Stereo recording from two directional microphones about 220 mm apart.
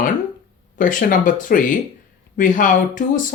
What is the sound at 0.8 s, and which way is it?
Speech, 40° left (ahead or behind).